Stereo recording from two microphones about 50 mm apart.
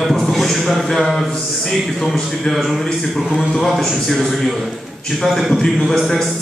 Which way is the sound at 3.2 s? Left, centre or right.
Centre.